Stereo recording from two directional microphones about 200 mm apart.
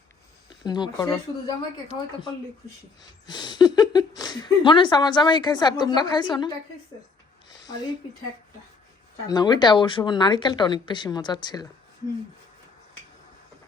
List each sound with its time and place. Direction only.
0.6 s speech: 20° left (ahead or behind)
3.2 s speech: 20° left (ahead or behind)
9.2 s speech: 20° left (ahead or behind)